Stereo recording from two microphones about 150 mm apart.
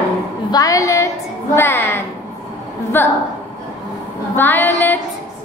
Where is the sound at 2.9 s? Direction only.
15° left (ahead or behind).